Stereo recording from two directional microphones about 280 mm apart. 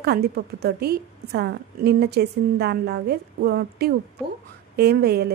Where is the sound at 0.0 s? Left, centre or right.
Right.